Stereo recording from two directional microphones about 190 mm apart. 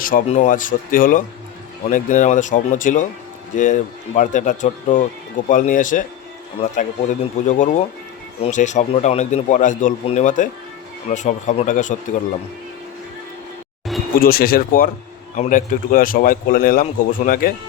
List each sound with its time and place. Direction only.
0.3 s a man's voice: 40° left (ahead or behind)
14.2 s a man's voice: 50° left (ahead or behind)